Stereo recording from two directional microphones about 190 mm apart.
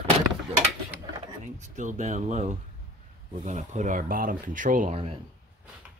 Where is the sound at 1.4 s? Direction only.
40° right (ahead or behind).